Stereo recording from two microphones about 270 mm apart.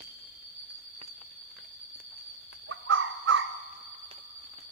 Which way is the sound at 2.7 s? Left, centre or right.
Right.